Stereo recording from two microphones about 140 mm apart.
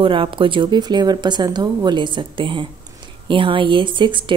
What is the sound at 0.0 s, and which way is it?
Speech, 40° right (ahead or behind).